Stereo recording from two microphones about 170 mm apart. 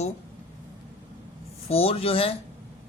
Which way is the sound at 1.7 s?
35° left (ahead or behind).